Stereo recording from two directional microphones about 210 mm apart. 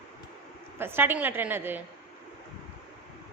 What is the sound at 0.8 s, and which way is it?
A woman's voice, 10° right (ahead or behind).